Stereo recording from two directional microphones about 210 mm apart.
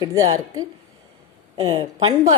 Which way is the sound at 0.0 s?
15° right (ahead or behind).